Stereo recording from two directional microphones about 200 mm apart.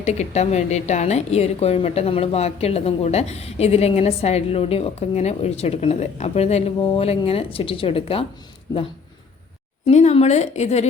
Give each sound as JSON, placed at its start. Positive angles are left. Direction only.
{"t": 0.0, "sound": "a woman's voice", "side_deg": 35}
{"t": 9.8, "sound": "a woman's voice", "side_deg": 35}